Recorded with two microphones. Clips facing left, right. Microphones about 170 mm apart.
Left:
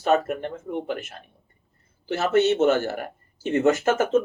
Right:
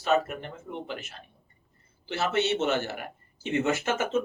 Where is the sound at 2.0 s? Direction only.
45° left (ahead or behind).